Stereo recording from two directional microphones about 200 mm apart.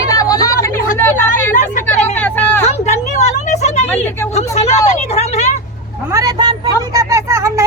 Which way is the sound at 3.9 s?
10° left (ahead or behind).